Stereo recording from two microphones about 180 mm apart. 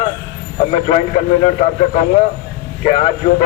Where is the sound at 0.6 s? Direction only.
35° left (ahead or behind).